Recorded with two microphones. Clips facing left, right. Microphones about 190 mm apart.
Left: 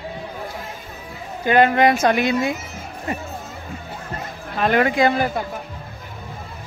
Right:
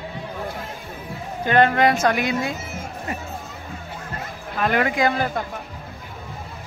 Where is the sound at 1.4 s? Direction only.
10° left (ahead or behind).